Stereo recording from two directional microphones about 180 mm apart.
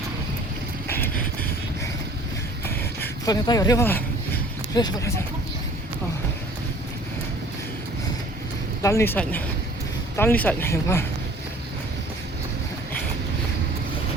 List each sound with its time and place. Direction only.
0.9 s vehicle: 10° left (ahead or behind)
3.2 s a sound: 20° left (ahead or behind)
4.8 s speech: 20° left (ahead or behind)
8.8 s speech: 15° left (ahead or behind)